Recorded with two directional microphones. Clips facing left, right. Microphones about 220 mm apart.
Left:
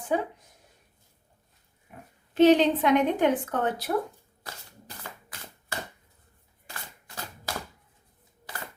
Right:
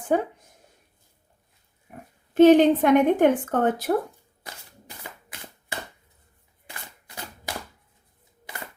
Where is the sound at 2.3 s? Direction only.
50° right (ahead or behind).